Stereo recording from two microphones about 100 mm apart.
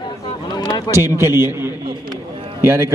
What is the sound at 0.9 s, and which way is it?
A man's voice, 25° right (ahead or behind).